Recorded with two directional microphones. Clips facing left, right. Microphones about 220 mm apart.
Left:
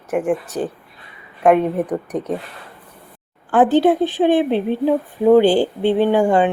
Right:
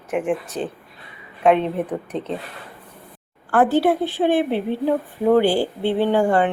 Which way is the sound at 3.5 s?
20° left (ahead or behind).